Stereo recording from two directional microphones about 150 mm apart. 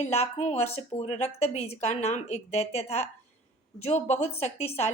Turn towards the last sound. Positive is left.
turn(degrees=45)  # may be behind; listen again after turning